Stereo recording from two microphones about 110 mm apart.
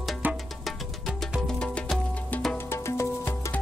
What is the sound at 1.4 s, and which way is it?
Music, 10° left (ahead or behind).